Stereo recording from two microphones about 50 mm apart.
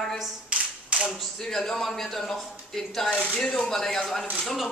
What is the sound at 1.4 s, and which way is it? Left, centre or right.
Speech, centre.